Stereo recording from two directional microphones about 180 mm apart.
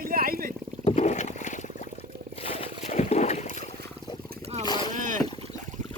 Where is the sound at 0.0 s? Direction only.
55° right (ahead or behind).